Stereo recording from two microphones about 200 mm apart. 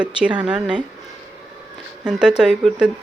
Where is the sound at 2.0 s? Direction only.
5° right (ahead or behind).